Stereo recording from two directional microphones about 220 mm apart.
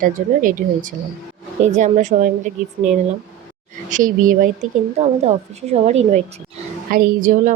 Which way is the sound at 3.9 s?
35° right (ahead or behind).